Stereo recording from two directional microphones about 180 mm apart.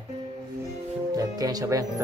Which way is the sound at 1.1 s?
20° right (ahead or behind).